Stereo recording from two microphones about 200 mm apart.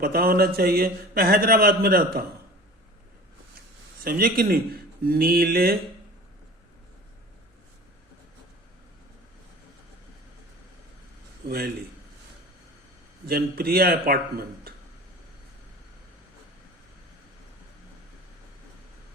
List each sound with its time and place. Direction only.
0.0 s a man's voice: 50° right (ahead or behind)
4.0 s a man's voice: 45° right (ahead or behind)
11.4 s a man's voice: 50° right (ahead or behind)
13.2 s a man's voice: 50° right (ahead or behind)